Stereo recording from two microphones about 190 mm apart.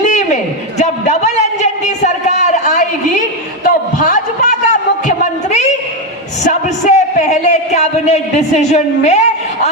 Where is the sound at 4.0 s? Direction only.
45° left (ahead or behind).